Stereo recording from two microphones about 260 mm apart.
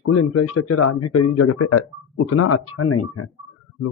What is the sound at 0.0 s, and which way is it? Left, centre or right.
A man's voice, left.